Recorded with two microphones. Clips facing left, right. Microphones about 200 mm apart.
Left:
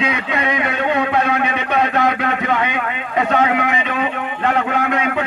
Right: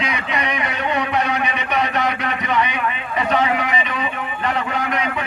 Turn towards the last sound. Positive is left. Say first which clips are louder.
# left 4 dB
turn(degrees=65)  # may be behind; listen again after turning